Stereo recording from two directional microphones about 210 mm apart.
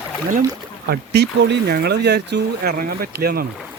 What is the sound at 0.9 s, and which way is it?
Speech, 50° right (ahead or behind).